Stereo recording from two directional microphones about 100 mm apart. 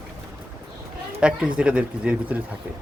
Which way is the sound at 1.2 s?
10° right (ahead or behind).